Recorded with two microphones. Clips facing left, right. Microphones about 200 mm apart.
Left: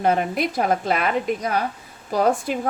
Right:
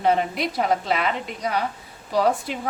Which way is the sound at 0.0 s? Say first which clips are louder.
Left 1 dB; 50° left (ahead or behind).